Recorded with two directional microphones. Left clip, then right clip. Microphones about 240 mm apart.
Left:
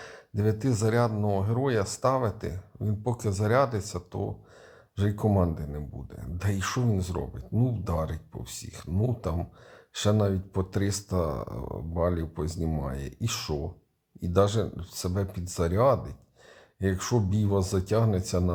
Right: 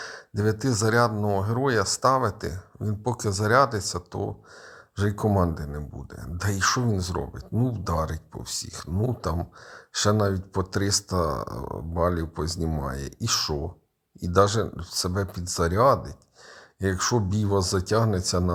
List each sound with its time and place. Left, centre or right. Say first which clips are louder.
0.0 s speech: right 3 dB; centre